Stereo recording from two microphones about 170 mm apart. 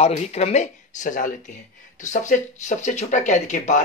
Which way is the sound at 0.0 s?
40° left (ahead or behind).